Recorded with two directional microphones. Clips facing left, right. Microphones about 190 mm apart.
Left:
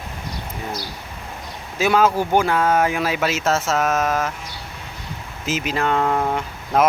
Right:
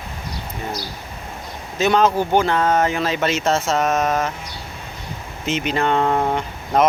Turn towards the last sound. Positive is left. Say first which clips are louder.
# right 1 dB
turn(degrees=5)  # may be behind; listen again after turning